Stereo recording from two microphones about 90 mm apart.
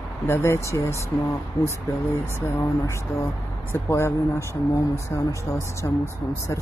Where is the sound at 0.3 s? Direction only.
30° left (ahead or behind).